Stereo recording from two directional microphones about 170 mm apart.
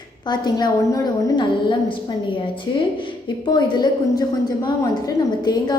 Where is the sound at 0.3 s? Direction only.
25° left (ahead or behind).